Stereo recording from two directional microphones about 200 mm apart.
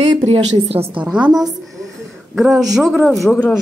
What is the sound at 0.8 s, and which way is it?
Speech, 5° right (ahead or behind).